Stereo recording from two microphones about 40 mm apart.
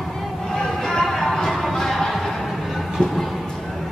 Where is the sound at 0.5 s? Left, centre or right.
Centre.